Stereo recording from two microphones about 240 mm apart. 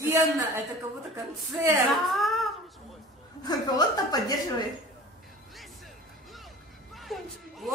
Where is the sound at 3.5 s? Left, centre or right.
Centre.